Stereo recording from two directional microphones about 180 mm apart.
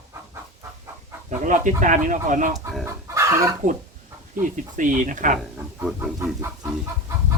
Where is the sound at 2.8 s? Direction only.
15° right (ahead or behind).